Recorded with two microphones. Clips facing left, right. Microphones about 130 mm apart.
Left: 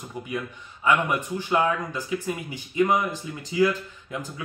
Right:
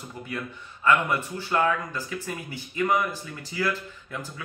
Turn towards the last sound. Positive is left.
turn(degrees=15)  # may be behind; listen again after turning